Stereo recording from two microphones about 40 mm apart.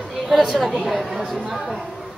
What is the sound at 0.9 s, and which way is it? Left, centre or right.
Speech, centre.